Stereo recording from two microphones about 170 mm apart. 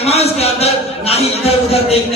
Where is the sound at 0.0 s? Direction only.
35° left (ahead or behind).